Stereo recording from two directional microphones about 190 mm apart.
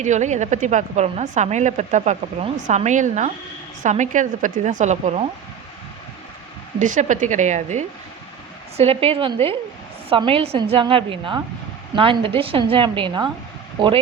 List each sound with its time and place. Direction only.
0.0 s a woman's voice: 40° right (ahead or behind)
6.7 s a woman's voice: 40° right (ahead or behind); by 14.0 s 25° right (ahead or behind)